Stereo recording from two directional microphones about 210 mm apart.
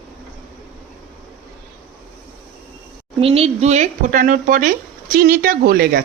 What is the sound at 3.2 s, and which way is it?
Speech, 30° right (ahead or behind).